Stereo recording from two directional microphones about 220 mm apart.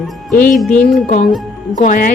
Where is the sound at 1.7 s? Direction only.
35° left (ahead or behind).